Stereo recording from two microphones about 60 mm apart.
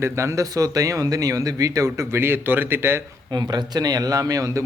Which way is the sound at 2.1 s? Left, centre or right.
Right.